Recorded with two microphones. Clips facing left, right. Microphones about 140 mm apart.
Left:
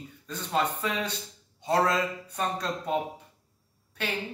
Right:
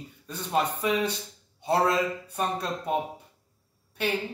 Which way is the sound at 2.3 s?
10° right (ahead or behind).